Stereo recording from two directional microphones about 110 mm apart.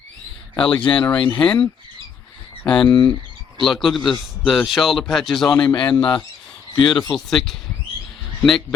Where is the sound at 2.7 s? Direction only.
45° left (ahead or behind).